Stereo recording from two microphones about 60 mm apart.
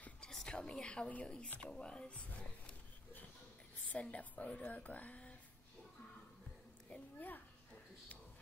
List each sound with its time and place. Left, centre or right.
0.2 s whispering: centre
1.6 s speech: centre
6.9 s a sound: left